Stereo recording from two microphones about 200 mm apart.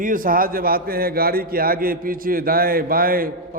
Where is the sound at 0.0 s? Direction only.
45° right (ahead or behind).